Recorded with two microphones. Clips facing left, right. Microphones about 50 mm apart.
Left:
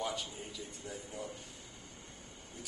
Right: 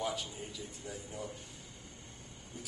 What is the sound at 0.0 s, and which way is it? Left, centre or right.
Speech, centre.